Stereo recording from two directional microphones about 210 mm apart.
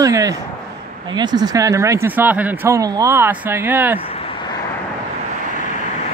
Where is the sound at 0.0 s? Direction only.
15° right (ahead or behind).